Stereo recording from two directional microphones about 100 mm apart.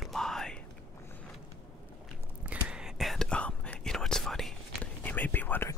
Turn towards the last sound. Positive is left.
turn(degrees=20)  # may be behind; listen again after turning